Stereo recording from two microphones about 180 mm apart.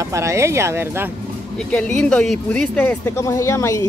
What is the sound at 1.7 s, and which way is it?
A woman's voice, 5° left (ahead or behind).